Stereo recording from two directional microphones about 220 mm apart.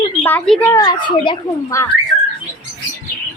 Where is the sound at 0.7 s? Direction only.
15° left (ahead or behind).